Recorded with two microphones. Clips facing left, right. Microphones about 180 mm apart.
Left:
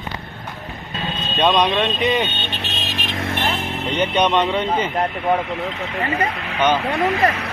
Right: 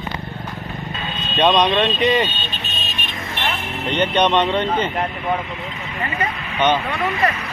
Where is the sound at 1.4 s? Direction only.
Centre (ahead or behind).